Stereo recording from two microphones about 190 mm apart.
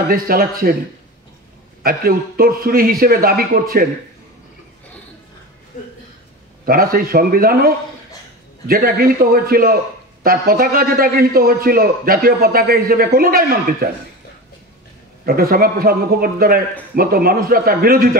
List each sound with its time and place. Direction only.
0.1 s a man's voice: 50° right (ahead or behind)
1.8 s a man's voice: 50° right (ahead or behind)
6.6 s a man's voice: 50° right (ahead or behind)
15.2 s a man's voice: 50° right (ahead or behind)